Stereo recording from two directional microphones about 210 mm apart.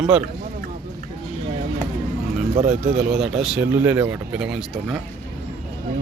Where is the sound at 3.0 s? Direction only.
5° right (ahead or behind).